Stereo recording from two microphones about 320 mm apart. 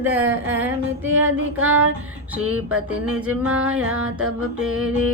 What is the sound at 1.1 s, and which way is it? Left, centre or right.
Music, right.